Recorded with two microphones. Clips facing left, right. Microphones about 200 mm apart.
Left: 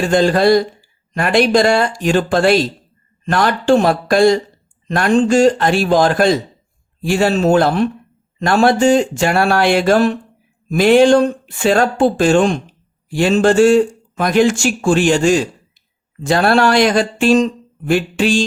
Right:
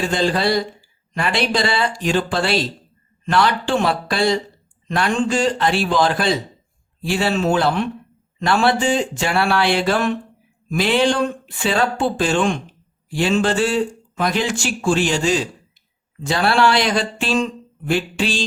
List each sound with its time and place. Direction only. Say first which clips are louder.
0.1 s speech: left 10 dB; 50° left (ahead or behind)